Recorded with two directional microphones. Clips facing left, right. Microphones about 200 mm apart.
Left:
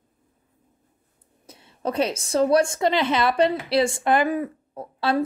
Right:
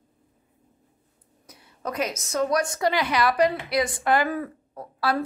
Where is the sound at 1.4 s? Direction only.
25° left (ahead or behind).